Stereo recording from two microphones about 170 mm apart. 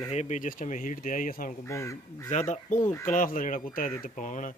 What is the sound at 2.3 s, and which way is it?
Speech, 45° left (ahead or behind).